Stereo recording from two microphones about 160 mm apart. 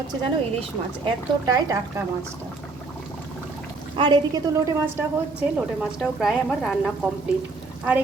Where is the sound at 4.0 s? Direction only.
25° right (ahead or behind).